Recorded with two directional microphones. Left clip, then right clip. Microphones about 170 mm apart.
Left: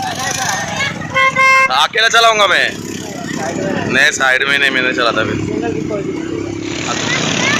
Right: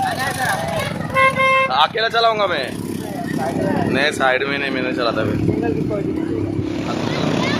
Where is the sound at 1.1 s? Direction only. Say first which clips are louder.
Left 4 dB; 20° right (ahead or behind).